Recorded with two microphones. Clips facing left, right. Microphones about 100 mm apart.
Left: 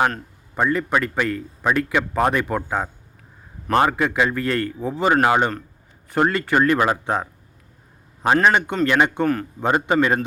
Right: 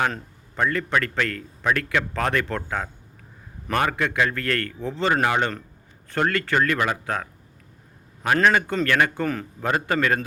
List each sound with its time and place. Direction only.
0.5 s a man's voice: 20° left (ahead or behind)
8.4 s a man's voice: 20° left (ahead or behind)
9.2 s a man's voice: 5° left (ahead or behind)
9.6 s a man's voice: 25° left (ahead or behind)